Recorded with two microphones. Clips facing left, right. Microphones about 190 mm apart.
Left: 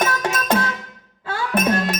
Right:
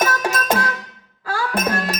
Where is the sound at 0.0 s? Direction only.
25° left (ahead or behind).